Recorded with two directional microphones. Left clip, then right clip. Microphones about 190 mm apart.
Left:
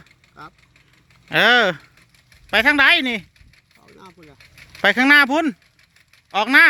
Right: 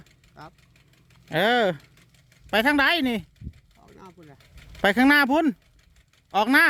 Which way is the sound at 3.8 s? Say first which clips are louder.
Left 4 dB; 5° right (ahead or behind).